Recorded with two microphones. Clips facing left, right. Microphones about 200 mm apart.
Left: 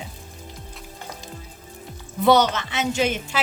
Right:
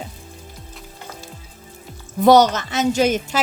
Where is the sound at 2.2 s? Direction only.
40° right (ahead or behind).